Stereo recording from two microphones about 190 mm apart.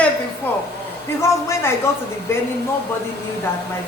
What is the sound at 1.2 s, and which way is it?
Speech, 15° left (ahead or behind).